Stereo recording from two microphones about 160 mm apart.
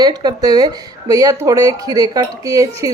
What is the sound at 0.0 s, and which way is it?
Speech, 25° right (ahead or behind).